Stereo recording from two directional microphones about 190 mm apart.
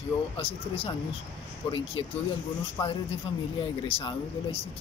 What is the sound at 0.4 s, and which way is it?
Speech, 30° left (ahead or behind).